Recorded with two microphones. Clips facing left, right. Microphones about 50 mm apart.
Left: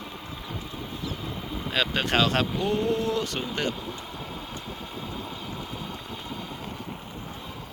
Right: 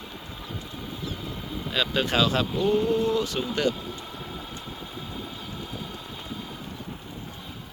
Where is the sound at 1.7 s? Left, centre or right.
Left.